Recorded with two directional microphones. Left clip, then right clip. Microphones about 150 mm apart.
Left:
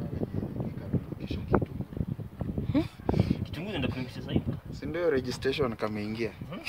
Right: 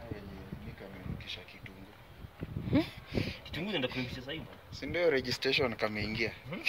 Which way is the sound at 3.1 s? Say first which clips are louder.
Left 11 dB; 90° left.